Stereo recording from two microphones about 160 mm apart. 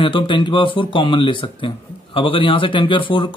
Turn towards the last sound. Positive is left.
turn(degrees=30)  # may be behind; listen again after turning